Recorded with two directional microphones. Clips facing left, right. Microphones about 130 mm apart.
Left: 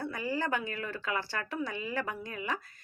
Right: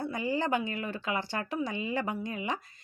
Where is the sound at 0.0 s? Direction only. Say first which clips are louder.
Right 3 dB; 20° right (ahead or behind).